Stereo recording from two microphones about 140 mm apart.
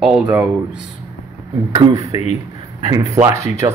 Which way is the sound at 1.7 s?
35° right (ahead or behind).